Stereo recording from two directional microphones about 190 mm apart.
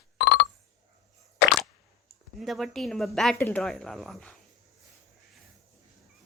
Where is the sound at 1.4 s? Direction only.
60° left (ahead or behind).